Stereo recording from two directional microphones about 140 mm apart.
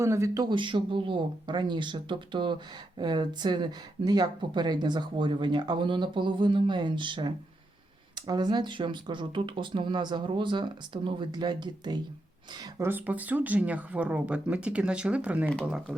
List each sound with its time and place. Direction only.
0.0 s speech: 20° right (ahead or behind)
0.4 s speech: 35° right (ahead or behind)
12.8 s speech: 10° right (ahead or behind)